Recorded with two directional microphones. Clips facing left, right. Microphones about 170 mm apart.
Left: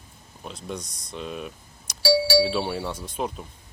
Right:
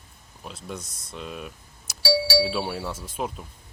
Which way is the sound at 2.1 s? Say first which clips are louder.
Left 3 dB; 50° left (ahead or behind).